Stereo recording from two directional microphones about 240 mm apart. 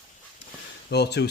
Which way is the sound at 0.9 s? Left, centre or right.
Left.